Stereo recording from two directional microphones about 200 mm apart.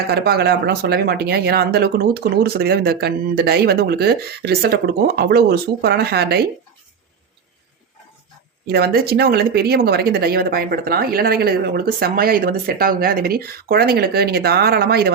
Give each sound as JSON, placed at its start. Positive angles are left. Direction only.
{"t": 0.1, "sound": "speech", "side_deg": -55}
{"t": 8.6, "sound": "speech", "side_deg": -55}